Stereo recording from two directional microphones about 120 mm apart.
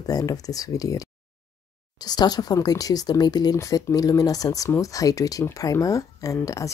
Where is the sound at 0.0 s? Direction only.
30° left (ahead or behind).